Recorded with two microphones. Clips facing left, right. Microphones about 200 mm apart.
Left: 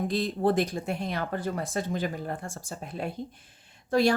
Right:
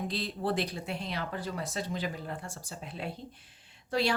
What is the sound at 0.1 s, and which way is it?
Speech, 50° left (ahead or behind).